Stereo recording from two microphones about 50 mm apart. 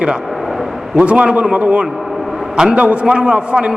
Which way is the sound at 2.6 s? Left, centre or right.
Centre.